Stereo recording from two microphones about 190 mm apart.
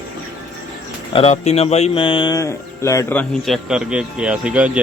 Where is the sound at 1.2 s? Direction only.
35° left (ahead or behind); by 3.2 s 15° left (ahead or behind).